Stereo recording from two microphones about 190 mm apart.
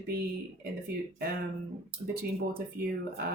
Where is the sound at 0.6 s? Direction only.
55° right (ahead or behind).